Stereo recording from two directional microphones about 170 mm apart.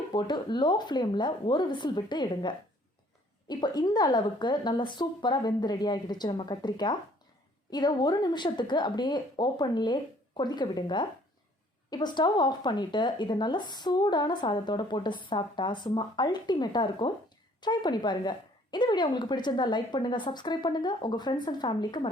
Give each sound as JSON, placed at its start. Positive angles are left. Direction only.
{"t": 0.1, "sound": "speech", "side_deg": 25}